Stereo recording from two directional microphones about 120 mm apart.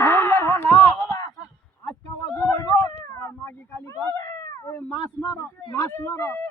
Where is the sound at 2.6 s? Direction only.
25° left (ahead or behind).